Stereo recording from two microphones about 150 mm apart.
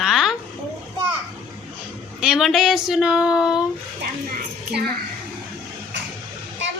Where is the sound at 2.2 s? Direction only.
Centre (ahead or behind).